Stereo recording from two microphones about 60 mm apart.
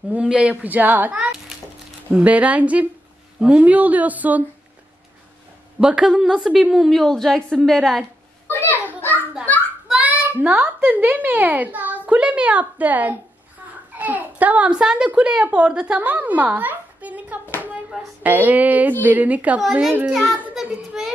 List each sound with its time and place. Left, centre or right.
0.1 s a child's voice: centre
1.1 s a child's voice: centre
5.8 s a woman's voice: centre
8.5 s children playing: left
9.9 s child singing: right
10.9 s a child's voice: right
14.7 s a woman's voice: centre
16.0 s a sound: right
18.2 s a child's voice: right
20.1 s a woman's voice: centre
20.9 s child singing: centre